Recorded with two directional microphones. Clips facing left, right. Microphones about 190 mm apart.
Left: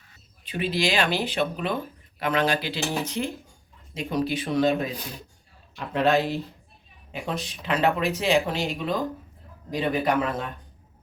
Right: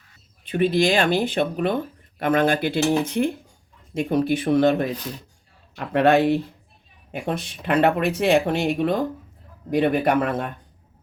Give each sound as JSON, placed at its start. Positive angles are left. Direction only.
{"t": 0.4, "sound": "speech", "side_deg": -50}